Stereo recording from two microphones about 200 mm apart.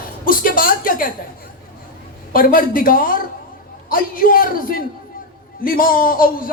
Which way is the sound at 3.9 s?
45° left (ahead or behind).